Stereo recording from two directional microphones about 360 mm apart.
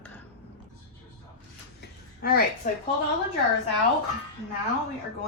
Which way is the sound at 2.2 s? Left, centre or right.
Left.